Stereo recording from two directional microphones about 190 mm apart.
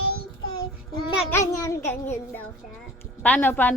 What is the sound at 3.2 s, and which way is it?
Speech, 10° left (ahead or behind).